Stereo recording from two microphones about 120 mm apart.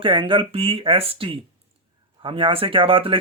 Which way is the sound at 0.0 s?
45° right (ahead or behind).